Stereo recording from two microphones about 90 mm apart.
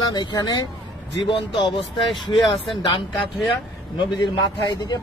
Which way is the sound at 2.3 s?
75° left (ahead or behind).